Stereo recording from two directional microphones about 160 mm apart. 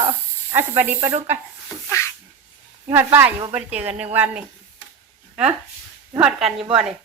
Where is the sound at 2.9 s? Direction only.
15° right (ahead or behind).